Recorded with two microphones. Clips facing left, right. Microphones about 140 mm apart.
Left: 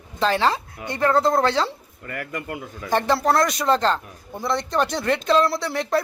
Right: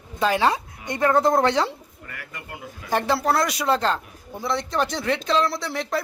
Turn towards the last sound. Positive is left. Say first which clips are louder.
# left 4 dB
turn(degrees=0)  # may be behind; listen again after turning